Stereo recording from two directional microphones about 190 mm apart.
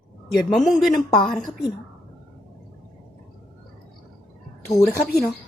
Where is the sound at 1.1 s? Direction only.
25° left (ahead or behind).